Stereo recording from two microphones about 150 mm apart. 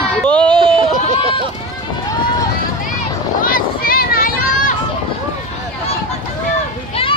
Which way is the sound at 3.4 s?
70° left (ahead or behind).